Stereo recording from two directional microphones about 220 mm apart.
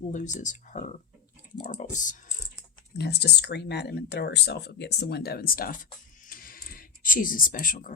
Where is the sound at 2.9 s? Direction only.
50° left (ahead or behind).